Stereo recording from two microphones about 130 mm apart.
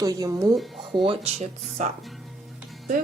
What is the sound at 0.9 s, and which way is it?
Speech, 40° right (ahead or behind).